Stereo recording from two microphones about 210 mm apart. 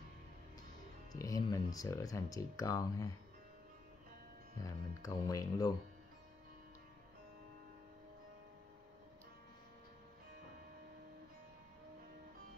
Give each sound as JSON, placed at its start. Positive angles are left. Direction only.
{"t": 1.1, "sound": "speech", "side_deg": 15}
{"t": 4.6, "sound": "speech", "side_deg": 15}